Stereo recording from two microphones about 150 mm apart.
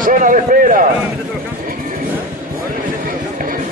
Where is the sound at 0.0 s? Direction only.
60° right (ahead or behind).